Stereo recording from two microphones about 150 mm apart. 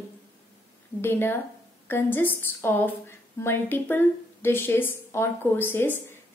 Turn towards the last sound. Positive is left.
turn(degrees=15)  # may be behind; listen again after turning